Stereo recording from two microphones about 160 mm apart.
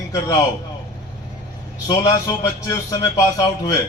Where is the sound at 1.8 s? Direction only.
20° left (ahead or behind).